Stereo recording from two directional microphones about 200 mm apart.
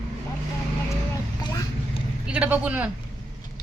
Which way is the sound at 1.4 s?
20° left (ahead or behind).